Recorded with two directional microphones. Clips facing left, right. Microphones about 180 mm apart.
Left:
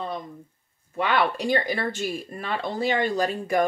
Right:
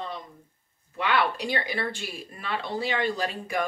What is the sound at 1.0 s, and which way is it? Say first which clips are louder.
Speech: left 2 dB; 45° left (ahead or behind).